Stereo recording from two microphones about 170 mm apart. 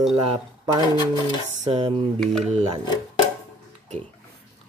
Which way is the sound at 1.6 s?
35° right (ahead or behind).